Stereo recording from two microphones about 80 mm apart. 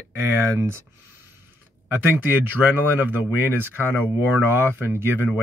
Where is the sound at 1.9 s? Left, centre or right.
Right.